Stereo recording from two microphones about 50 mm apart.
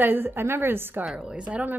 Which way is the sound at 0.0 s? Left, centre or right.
Right.